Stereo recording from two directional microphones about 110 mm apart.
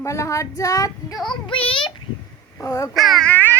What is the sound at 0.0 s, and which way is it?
A woman's voice, 25° left (ahead or behind).